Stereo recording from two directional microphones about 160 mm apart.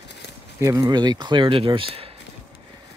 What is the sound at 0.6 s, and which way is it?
Speech, 20° right (ahead or behind).